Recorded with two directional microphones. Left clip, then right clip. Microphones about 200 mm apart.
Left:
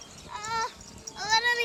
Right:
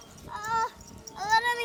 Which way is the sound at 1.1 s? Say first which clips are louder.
Even; 35° right (ahead or behind).